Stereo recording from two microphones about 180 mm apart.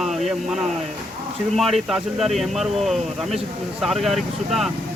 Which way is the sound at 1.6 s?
Centre (ahead or behind).